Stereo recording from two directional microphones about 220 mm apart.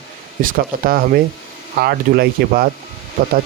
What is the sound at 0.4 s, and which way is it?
Speech, 40° right (ahead or behind).